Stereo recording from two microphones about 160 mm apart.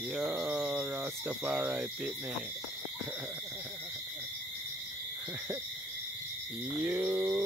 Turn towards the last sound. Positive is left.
turn(degrees=-15)  # may be behind; listen again after turning